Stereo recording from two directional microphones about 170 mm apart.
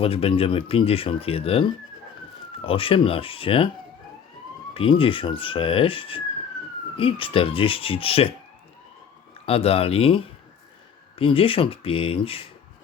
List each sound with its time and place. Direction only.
0.0 s speech: 35° left (ahead or behind)
4.7 s speech: 30° left (ahead or behind)
9.5 s speech: 35° left (ahead or behind)